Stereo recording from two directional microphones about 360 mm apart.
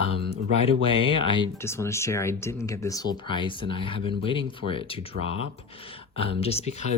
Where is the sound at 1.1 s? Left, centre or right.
Centre.